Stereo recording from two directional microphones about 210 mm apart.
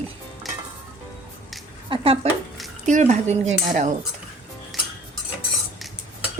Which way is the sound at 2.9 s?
35° right (ahead or behind).